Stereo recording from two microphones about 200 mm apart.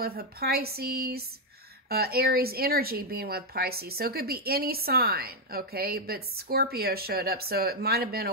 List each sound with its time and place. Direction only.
0.0 s speech: 50° right (ahead or behind)